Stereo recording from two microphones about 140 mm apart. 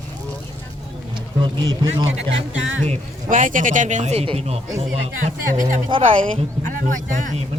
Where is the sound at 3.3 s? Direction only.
70° right (ahead or behind); by 4.6 s 45° right (ahead or behind).